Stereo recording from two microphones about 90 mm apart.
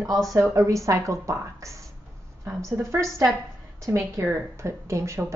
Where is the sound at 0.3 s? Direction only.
40° right (ahead or behind).